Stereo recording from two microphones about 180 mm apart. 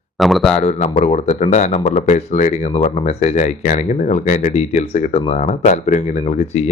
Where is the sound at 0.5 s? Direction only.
40° left (ahead or behind).